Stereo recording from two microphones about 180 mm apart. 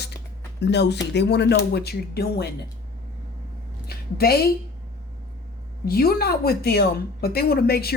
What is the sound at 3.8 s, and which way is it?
Speech, 60° left (ahead or behind).